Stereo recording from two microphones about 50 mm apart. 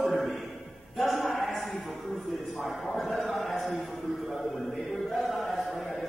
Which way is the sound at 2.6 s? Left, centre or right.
Centre.